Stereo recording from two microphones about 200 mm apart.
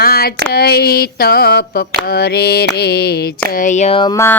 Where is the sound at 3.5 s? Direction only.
40° left (ahead or behind).